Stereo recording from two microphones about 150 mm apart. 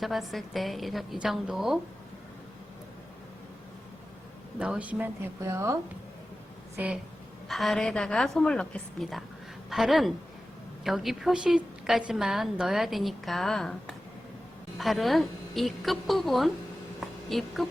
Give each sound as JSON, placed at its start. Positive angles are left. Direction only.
{"t": 0.0, "sound": "a woman's voice", "side_deg": 0}
{"t": 4.6, "sound": "speech", "side_deg": -10}
{"t": 6.7, "sound": "a woman's voice", "side_deg": -5}